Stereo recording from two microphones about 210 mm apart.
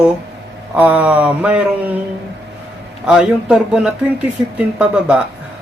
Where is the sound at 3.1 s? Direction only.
5° right (ahead or behind).